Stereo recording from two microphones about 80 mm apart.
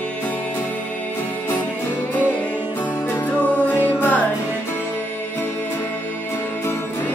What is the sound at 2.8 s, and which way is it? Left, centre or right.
Music, left.